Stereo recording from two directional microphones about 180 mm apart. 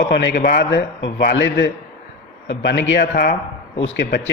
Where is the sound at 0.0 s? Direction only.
60° left (ahead or behind).